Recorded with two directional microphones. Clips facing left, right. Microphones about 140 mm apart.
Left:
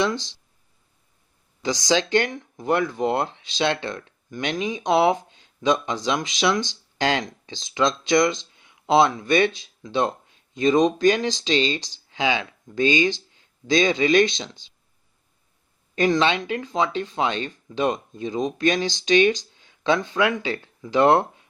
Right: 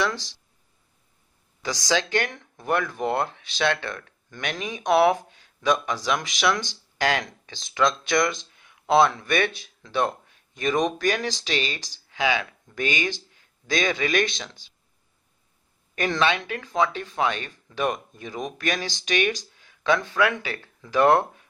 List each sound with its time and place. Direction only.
0.0 s speech: 20° left (ahead or behind)
1.6 s speech: 20° left (ahead or behind)
16.0 s speech: 20° left (ahead or behind)